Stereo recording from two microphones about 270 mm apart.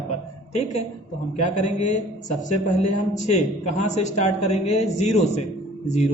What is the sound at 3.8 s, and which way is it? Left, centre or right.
Speech, left.